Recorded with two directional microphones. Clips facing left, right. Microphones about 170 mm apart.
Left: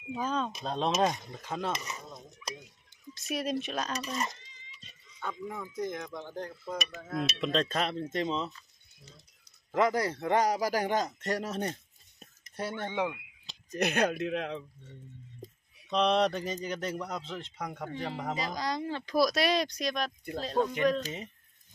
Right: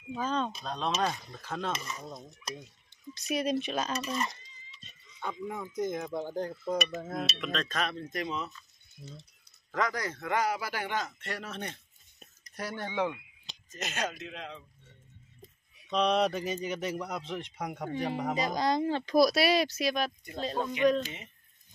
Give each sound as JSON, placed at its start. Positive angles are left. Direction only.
{"t": 0.1, "sound": "speech", "side_deg": 5}
{"t": 0.7, "sound": "speech", "side_deg": 25}
{"t": 3.2, "sound": "speech", "side_deg": 0}
{"t": 5.2, "sound": "speech", "side_deg": -15}
{"t": 7.3, "sound": "speech", "side_deg": 30}
{"t": 9.7, "sound": "a man's voice", "side_deg": 25}
{"t": 12.4, "sound": "speech", "side_deg": 25}
{"t": 13.7, "sound": "speech", "side_deg": 65}
{"t": 15.4, "sound": "a sound", "side_deg": 35}
{"t": 15.9, "sound": "speech", "side_deg": 0}
{"t": 19.1, "sound": "speech", "side_deg": -10}
{"t": 21.0, "sound": "a man's voice", "side_deg": 35}